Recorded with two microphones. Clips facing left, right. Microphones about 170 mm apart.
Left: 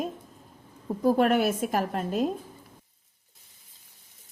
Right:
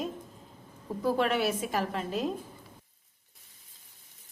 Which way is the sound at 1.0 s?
45° left (ahead or behind).